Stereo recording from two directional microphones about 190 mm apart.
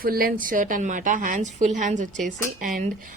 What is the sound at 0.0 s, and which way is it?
A woman's voice, 50° right (ahead or behind).